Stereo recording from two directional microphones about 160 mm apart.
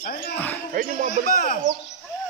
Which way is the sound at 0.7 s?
55° right (ahead or behind).